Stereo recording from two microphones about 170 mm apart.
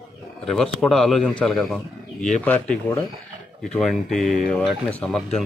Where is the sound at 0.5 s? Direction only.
Centre (ahead or behind).